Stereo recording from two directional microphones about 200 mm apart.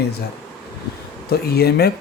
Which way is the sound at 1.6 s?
50° left (ahead or behind).